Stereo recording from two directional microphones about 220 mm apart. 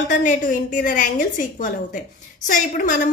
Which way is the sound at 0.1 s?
35° left (ahead or behind).